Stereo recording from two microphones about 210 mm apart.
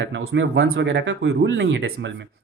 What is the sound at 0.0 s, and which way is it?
A man's voice, 60° right (ahead or behind).